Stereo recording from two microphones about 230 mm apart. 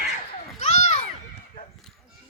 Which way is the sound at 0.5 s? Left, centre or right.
Left.